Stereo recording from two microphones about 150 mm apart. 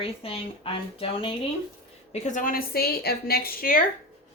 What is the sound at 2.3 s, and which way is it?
A woman's voice, 70° left (ahead or behind).